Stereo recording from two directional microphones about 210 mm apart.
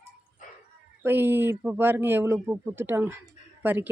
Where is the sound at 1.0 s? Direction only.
10° right (ahead or behind).